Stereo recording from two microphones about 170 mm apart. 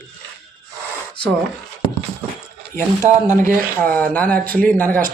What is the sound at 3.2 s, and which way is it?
Speech, 15° left (ahead or behind).